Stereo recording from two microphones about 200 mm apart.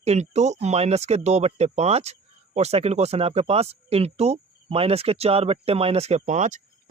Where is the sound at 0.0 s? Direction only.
35° right (ahead or behind).